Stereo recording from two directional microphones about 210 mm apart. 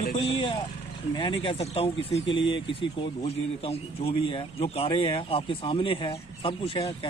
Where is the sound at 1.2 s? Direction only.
25° left (ahead or behind).